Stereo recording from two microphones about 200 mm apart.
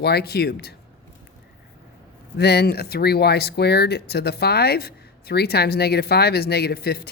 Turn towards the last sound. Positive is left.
turn(degrees=50)  # may be behind; listen again after turning